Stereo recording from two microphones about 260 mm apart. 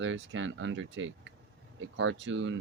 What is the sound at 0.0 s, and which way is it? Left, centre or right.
Speech, right.